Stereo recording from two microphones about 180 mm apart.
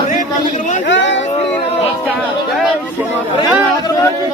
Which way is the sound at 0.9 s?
90° left.